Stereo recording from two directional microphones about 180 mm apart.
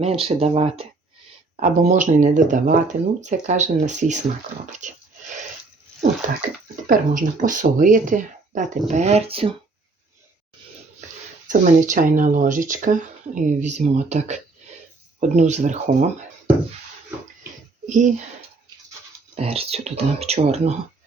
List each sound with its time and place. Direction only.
0.0 s speech: 35° right (ahead or behind)
6.2 s speech: 45° right (ahead or behind); by 9.6 s 30° right (ahead or behind)
11.4 s speech: 45° right (ahead or behind)
17.8 s speech: 45° right (ahead or behind)
19.4 s speech: 35° right (ahead or behind)